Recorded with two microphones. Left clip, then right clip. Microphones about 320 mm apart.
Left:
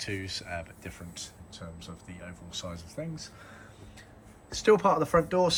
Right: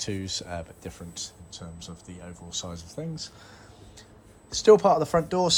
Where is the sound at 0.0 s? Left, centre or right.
Centre.